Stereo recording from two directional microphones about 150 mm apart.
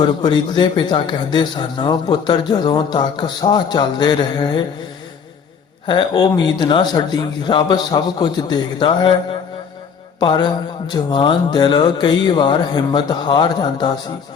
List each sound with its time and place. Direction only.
0.0 s a man's voice: 30° left (ahead or behind)
5.8 s a man's voice: 30° left (ahead or behind)